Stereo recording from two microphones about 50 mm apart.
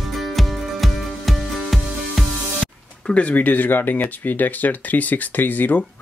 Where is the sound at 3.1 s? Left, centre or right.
Left.